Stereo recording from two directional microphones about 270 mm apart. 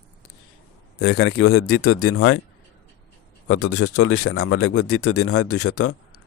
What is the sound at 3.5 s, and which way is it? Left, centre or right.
Speech, left.